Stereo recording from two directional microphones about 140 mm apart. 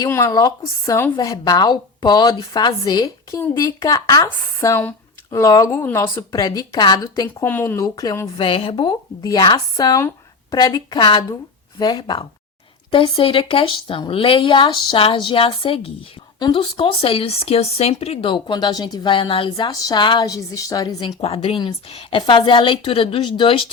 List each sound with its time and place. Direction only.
0.1 s a woman's voice: 25° left (ahead or behind)
7.8 s a woman's voice: 25° left (ahead or behind)
8.4 s a woman's voice: 40° left (ahead or behind)
21.2 s speech: 40° left (ahead or behind)